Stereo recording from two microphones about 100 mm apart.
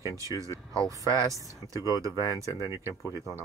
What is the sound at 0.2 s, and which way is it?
Speech, 35° right (ahead or behind).